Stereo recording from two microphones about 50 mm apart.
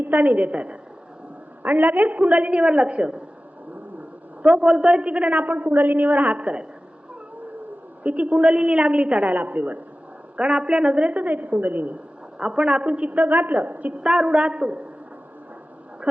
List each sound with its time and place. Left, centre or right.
0.0 s a woman's voice: right
4.4 s a woman's voice: right
8.0 s a woman's voice: right
10.3 s a woman's voice: right
12.4 s a woman's voice: right
14.0 s a woman's voice: centre